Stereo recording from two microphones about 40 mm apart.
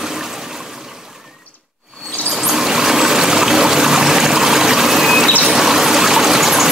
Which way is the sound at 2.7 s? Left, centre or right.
Centre.